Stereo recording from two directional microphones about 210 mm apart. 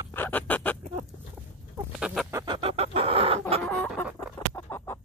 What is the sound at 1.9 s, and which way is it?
Chicken, 5° right (ahead or behind).